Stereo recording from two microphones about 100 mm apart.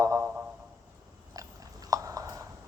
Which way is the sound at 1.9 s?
35° right (ahead or behind).